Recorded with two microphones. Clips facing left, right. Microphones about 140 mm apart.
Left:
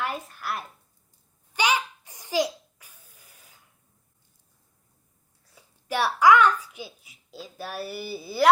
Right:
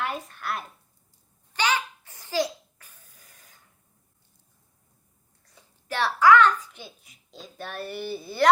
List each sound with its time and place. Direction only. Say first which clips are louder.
0.0 s speech: even; centre (ahead or behind)
1.5 s a sound: left 1 dB; 15° left (ahead or behind)
5.5 s a child's voice: left 4 dB; 10° left (ahead or behind)